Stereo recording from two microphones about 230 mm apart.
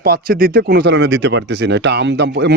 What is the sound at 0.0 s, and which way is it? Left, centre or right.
Speech, right.